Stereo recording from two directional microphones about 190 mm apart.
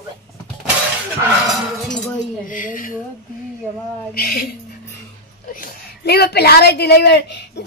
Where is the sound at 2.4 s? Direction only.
45° left (ahead or behind).